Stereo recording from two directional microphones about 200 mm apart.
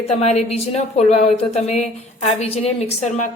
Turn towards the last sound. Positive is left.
turn(degrees=35)  # may be behind; listen again after turning